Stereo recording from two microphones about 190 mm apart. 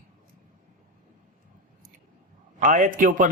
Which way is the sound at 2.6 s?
40° right (ahead or behind).